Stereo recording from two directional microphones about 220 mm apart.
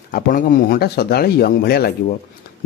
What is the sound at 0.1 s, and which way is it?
Speech, 40° left (ahead or behind).